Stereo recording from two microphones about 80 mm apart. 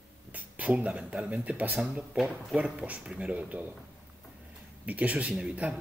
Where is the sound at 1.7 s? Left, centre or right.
Centre.